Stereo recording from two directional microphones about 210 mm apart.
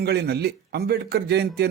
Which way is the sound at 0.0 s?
50° right (ahead or behind).